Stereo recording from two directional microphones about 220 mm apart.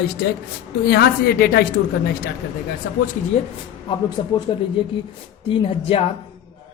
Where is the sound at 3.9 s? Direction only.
25° left (ahead or behind).